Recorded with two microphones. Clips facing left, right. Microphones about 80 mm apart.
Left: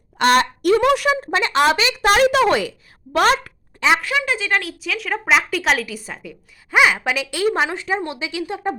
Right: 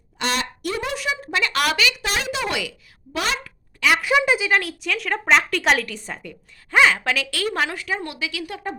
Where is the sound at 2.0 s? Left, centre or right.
Left.